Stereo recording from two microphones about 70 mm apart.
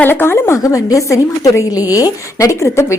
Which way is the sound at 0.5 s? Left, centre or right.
Left.